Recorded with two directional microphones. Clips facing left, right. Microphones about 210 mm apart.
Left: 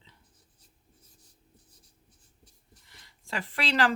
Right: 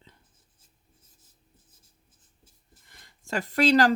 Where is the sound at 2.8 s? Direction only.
50° right (ahead or behind).